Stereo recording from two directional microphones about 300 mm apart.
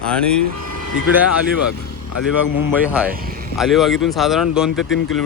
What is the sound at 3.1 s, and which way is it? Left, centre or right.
Speech, right.